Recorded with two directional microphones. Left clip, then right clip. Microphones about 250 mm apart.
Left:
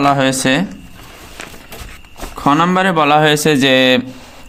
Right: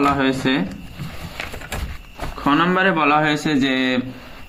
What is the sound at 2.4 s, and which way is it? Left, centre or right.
Speech, left.